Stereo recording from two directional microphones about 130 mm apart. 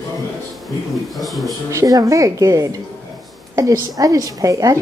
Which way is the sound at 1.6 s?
25° right (ahead or behind).